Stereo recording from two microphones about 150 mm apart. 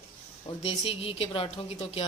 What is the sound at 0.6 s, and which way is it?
A woman's voice, 40° left (ahead or behind).